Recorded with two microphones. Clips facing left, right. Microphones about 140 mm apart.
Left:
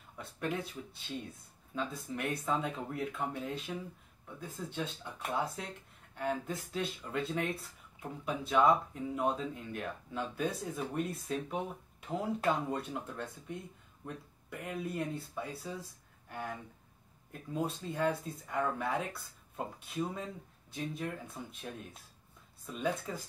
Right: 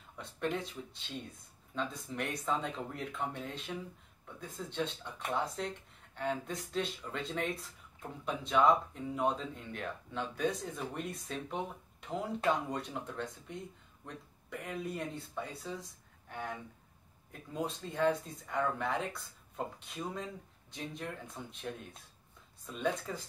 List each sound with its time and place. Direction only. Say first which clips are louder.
0.2 s speech: right 1 dB; 5° left (ahead or behind)
1.8 s speech: even; 5° left (ahead or behind)